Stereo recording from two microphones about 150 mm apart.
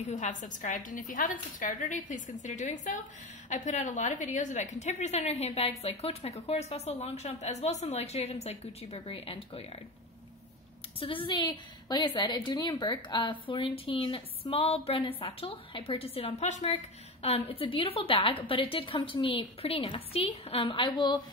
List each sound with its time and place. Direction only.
0.1 s a woman's voice: 55° left (ahead or behind); by 9.7 s 40° left (ahead or behind)
11.0 s a woman's voice: 35° left (ahead or behind)